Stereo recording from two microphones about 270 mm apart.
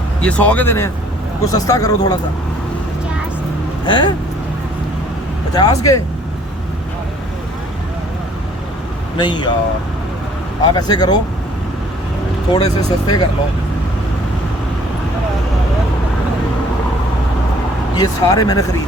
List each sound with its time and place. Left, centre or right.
0.2 s speech: centre
3.8 s speech: centre
5.5 s speech: centre
9.1 s speech: centre
10.6 s speech: centre
12.5 s speech: centre
17.9 s speech: centre